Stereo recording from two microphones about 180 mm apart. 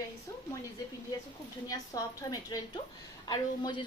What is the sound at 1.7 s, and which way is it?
A woman's voice, 20° left (ahead or behind).